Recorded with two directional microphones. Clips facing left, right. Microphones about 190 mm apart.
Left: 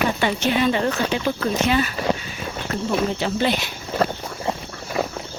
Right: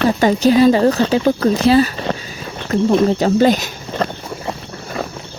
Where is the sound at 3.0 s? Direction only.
40° right (ahead or behind).